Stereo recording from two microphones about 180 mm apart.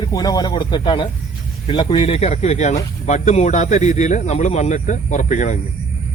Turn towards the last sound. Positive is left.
turn(degrees=45)  # may be behind; listen again after turning